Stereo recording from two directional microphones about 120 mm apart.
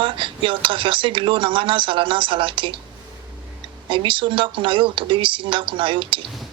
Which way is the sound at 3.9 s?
45° right (ahead or behind).